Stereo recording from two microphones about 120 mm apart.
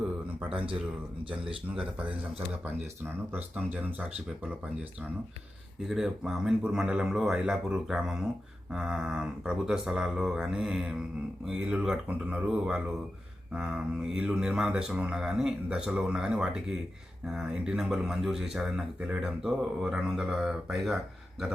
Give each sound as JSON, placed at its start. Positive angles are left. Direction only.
{"t": 0.5, "sound": "speech", "side_deg": -50}
{"t": 1.7, "sound": "speech", "side_deg": -10}
{"t": 5.9, "sound": "speech", "side_deg": -5}